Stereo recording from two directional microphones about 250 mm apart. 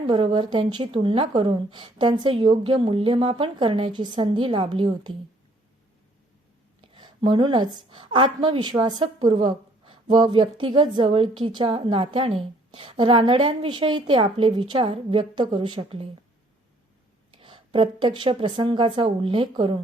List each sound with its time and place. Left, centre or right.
0.1 s a woman's voice: centre
6.8 s a woman's voice: centre
17.3 s a woman's voice: centre